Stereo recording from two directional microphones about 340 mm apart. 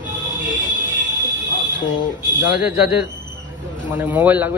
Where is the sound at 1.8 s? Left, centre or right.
Centre.